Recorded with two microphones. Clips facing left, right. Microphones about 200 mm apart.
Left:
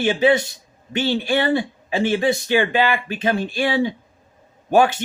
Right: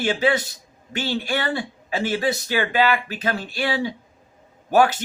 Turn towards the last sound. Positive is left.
turn(degrees=20)  # may be behind; listen again after turning